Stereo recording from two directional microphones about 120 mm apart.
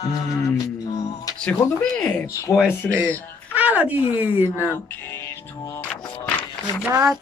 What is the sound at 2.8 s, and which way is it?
Speech, 5° left (ahead or behind).